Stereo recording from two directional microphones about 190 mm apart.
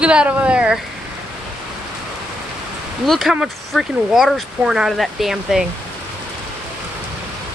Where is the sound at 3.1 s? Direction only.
Centre (ahead or behind).